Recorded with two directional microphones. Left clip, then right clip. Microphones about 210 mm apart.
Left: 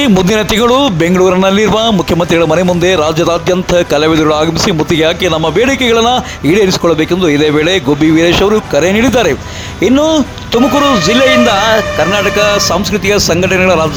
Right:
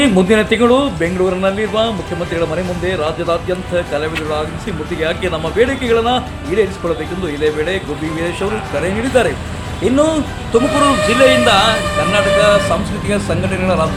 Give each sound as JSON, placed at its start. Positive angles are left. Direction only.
{"t": 0.0, "sound": "a man's voice", "side_deg": 50}